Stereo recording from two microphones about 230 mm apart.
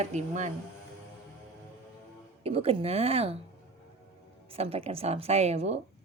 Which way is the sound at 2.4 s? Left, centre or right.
Right.